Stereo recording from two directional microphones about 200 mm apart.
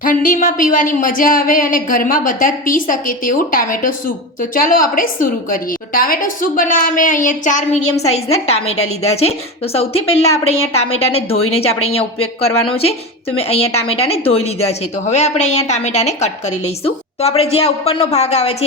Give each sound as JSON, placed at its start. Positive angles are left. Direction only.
{"t": 0.0, "sound": "a woman's voice", "side_deg": 45}
{"t": 9.7, "sound": "a woman's voice", "side_deg": 30}